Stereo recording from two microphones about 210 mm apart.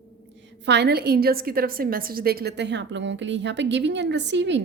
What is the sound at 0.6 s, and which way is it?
A woman's voice, 55° right (ahead or behind).